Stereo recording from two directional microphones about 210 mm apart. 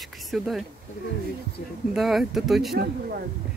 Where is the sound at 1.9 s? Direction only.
Centre (ahead or behind).